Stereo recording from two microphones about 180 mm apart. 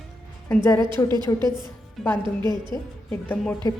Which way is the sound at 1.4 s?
25° right (ahead or behind).